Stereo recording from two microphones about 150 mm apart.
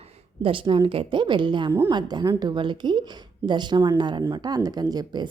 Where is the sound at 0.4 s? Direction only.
35° right (ahead or behind).